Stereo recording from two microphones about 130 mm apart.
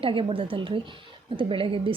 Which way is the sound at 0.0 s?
45° right (ahead or behind).